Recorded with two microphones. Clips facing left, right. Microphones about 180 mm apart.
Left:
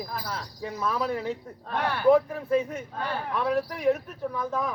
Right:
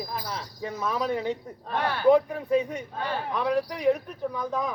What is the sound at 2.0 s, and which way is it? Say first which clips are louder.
Speech: even; 5° left (ahead or behind).